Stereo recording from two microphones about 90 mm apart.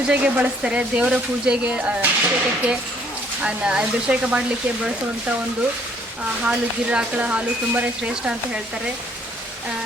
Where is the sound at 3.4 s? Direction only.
10° right (ahead or behind).